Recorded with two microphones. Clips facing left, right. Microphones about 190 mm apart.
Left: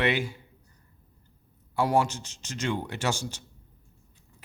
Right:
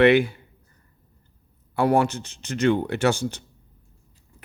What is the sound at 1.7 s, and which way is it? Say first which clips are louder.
Speech: right 5 dB; 60° right (ahead or behind).